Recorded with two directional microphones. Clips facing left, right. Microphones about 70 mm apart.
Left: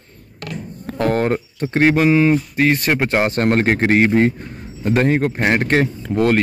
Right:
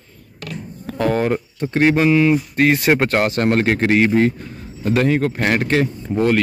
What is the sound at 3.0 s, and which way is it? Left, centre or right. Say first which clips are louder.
Speech: even; centre.